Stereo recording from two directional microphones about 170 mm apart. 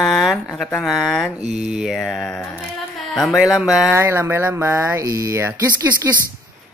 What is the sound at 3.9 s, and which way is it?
Speech, 15° right (ahead or behind).